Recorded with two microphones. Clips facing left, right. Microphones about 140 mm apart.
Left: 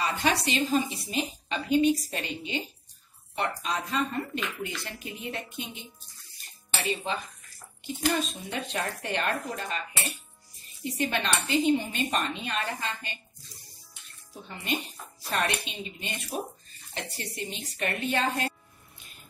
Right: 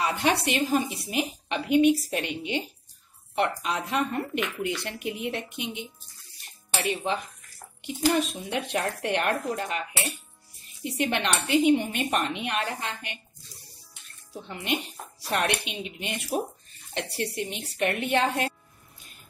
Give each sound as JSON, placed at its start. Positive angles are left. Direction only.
{"t": 0.0, "sound": "a woman's voice", "side_deg": -65}
{"t": 7.8, "sound": "a woman's voice", "side_deg": -70}
{"t": 14.3, "sound": "a woman's voice", "side_deg": -75}